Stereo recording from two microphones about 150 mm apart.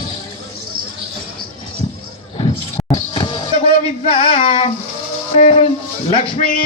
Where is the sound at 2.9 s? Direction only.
35° left (ahead or behind).